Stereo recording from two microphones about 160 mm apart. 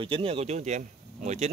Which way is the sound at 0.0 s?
35° right (ahead or behind).